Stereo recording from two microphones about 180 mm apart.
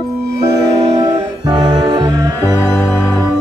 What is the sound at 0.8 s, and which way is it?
Music, 30° right (ahead or behind).